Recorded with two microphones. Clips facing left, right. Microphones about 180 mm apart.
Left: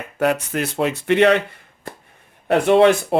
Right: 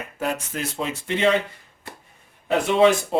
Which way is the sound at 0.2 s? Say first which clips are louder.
Left 8 dB; 65° left (ahead or behind).